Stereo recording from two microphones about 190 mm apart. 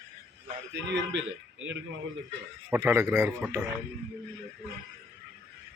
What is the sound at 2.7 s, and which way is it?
Speech, 15° right (ahead or behind).